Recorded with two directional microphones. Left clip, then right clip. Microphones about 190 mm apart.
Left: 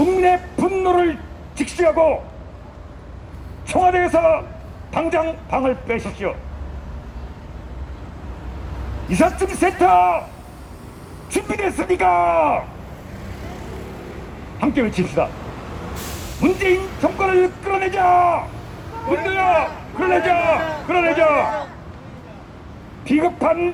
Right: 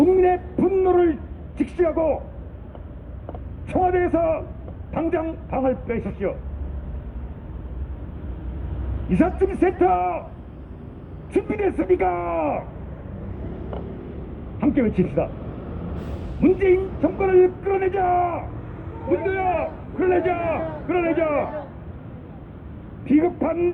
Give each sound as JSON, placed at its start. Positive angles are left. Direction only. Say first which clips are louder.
{"t": 0.0, "sound": "a sound", "louder": "left 2 dB", "side_deg": 60}
{"t": 1.5, "sound": "speech", "louder": "left 5 dB", "side_deg": 60}
{"t": 3.7, "sound": "speech", "louder": "left 5 dB", "side_deg": 60}
{"t": 9.0, "sound": "speech", "louder": "left 3 dB", "side_deg": 60}
{"t": 11.3, "sound": "speech", "louder": "left 1 dB", "side_deg": 60}
{"t": 14.6, "sound": "speech", "louder": "left 1 dB", "side_deg": 65}
{"t": 16.4, "sound": "a man's voice", "louder": "even", "side_deg": 65}
{"t": 23.0, "sound": "a man's voice", "louder": "left 3 dB", "side_deg": 65}